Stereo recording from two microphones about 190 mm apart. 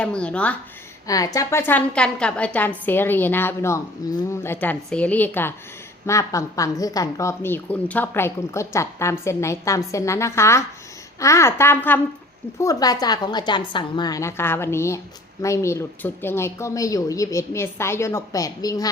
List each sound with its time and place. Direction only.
0.0 s a woman's voice: 5° left (ahead or behind)
1.0 s a woman's voice: 20° left (ahead or behind)